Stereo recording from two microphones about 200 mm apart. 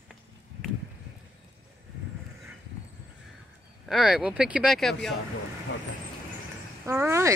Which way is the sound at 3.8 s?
Centre (ahead or behind).